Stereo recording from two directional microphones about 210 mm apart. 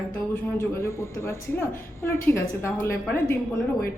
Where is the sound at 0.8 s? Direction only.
10° left (ahead or behind).